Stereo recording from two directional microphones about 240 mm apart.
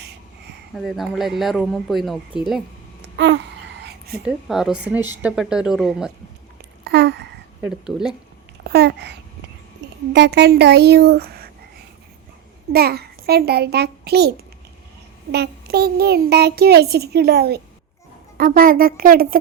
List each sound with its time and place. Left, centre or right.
0.8 s speech: centre
3.0 s a sound: right
4.2 s speech: centre
6.8 s speech: right
7.6 s speech: centre
8.6 s a woman's voice: right
12.7 s a child's voice: right